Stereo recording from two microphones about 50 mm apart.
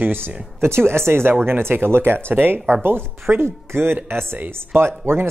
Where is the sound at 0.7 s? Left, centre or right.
Right.